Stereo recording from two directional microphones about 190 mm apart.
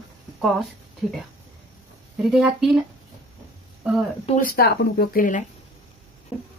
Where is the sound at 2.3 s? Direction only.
Centre (ahead or behind).